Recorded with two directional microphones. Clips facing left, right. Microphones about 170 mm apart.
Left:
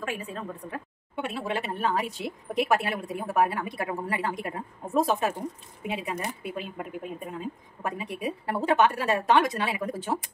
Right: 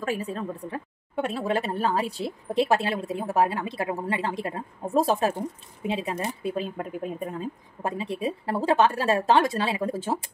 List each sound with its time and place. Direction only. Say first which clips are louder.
0.0 s a woman's voice: right 5 dB; 35° right (ahead or behind)